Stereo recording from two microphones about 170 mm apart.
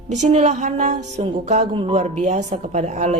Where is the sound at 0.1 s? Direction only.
45° right (ahead or behind).